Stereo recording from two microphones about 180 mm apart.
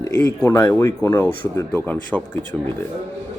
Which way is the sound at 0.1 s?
15° left (ahead or behind).